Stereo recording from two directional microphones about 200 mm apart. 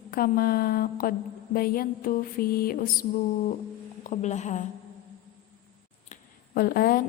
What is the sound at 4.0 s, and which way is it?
Speech, 35° left (ahead or behind).